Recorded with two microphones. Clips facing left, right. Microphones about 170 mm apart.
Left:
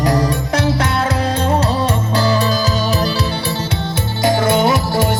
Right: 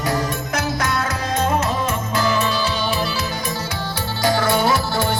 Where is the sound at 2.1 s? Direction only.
35° left (ahead or behind).